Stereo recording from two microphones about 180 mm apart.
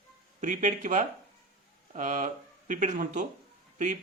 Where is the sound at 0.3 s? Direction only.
40° right (ahead or behind).